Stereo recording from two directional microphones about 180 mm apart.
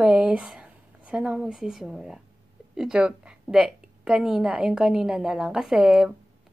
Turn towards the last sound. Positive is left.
turn(degrees=-5)  # may be behind; listen again after turning